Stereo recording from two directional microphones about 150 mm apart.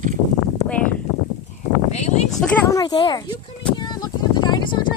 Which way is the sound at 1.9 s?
50° left (ahead or behind).